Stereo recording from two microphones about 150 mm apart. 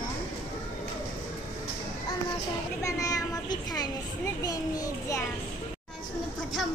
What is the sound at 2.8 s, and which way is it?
A child's voice, 20° left (ahead or behind).